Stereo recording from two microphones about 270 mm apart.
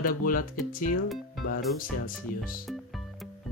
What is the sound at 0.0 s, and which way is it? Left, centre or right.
Speech, left.